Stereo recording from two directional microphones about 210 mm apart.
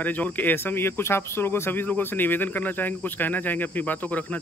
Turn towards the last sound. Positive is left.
turn(degrees=10)  # may be behind; listen again after turning